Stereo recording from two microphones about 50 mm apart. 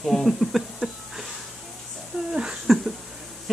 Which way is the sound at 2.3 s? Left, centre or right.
Centre.